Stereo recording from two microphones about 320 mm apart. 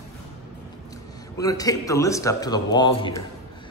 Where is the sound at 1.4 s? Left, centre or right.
Centre.